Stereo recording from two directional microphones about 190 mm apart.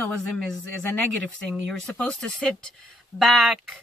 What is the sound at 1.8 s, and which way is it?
Speech, 5° left (ahead or behind).